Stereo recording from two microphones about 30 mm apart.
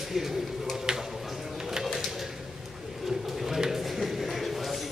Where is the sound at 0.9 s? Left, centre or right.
Right.